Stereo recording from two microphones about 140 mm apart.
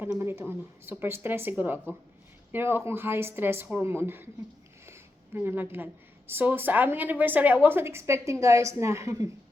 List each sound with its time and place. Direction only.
0.0 s speech: 15° right (ahead or behind)